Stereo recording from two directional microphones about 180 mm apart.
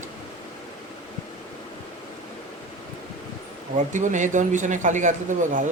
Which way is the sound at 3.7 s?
45° right (ahead or behind).